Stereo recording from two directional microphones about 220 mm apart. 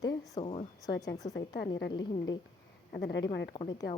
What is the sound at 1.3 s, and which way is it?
Speech, 50° left (ahead or behind).